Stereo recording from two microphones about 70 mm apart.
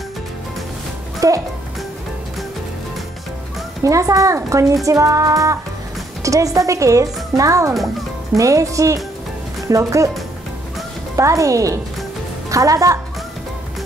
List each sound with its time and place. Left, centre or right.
1.2 s speech: right
3.8 s speech: right
11.1 s a woman's voice: right